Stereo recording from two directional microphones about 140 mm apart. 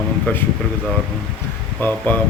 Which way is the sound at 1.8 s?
10° left (ahead or behind).